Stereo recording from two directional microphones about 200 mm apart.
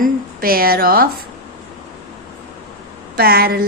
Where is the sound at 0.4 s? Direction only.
50° right (ahead or behind).